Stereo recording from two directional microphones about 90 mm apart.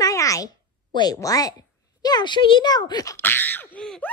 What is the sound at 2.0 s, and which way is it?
Speech, 50° left (ahead or behind).